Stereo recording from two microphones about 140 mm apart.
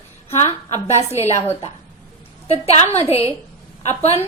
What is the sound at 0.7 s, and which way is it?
Speech, 20° right (ahead or behind).